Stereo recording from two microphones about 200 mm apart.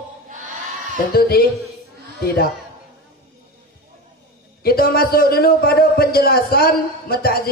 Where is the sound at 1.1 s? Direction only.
50° left (ahead or behind).